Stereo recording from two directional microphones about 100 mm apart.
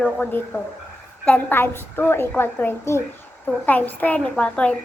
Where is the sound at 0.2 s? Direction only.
20° left (ahead or behind).